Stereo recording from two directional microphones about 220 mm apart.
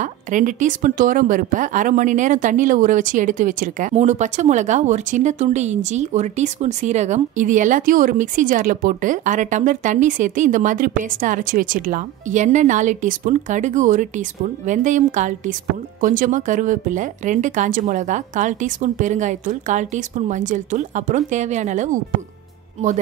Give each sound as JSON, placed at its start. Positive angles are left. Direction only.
{"t": 0.0, "sound": "speech", "side_deg": -35}